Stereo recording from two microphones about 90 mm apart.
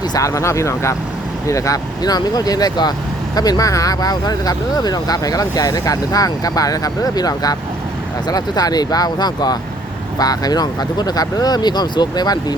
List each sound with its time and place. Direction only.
0.1 s speech: 35° left (ahead or behind)